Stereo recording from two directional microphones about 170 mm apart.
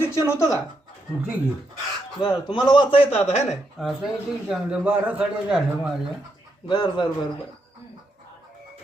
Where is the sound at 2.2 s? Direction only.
25° left (ahead or behind).